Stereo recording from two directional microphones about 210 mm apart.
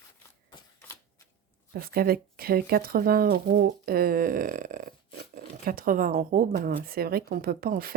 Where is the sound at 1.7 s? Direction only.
45° right (ahead or behind).